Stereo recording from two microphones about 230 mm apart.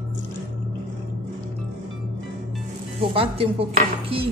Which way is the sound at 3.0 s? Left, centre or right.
Right.